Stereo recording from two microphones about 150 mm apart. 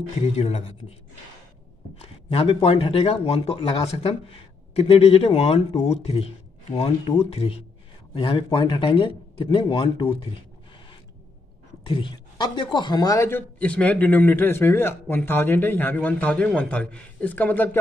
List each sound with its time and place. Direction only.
0.2 s speech: 45° left (ahead or behind)
2.0 s speech: 40° left (ahead or behind)
11.8 s a woman's voice: 35° left (ahead or behind)
13.6 s a man's voice: 10° left (ahead or behind)